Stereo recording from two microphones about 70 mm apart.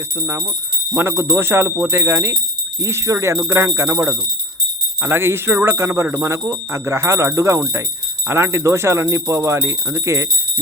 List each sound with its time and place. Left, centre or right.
0.9 s speech: right
5.7 s speech: right